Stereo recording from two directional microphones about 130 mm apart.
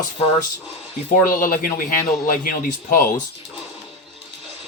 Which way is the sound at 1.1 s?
90° left.